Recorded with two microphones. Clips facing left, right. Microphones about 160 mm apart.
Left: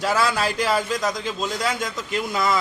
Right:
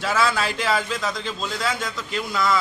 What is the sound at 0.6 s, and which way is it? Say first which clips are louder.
A man's voice: left 2 dB; 10° left (ahead or behind).